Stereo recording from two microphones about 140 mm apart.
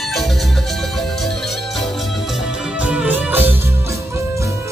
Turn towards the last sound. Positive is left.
turn(degrees=-15)  # may be behind; listen again after turning